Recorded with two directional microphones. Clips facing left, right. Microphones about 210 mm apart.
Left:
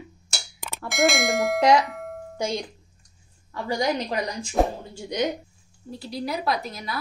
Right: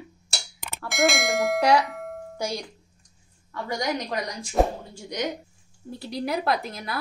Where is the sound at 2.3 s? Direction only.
20° left (ahead or behind).